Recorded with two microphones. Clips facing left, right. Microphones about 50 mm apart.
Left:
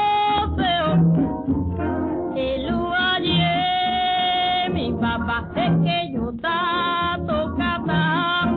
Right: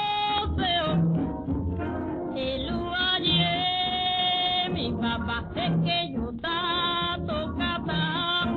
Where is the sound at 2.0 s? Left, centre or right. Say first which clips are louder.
Left 7 dB; left.